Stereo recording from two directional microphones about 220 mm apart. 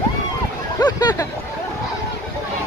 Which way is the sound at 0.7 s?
15° left (ahead or behind).